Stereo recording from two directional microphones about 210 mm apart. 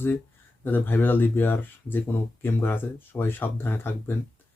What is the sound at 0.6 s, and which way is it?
Speech, 10° left (ahead or behind).